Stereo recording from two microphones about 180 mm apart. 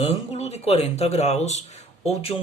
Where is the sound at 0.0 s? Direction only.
35° left (ahead or behind).